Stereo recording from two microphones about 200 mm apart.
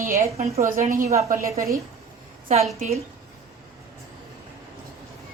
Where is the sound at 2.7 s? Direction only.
35° right (ahead or behind).